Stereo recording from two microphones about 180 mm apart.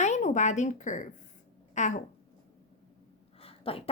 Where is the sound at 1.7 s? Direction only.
40° left (ahead or behind).